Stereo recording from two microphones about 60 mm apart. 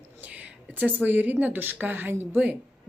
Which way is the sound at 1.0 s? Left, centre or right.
Right.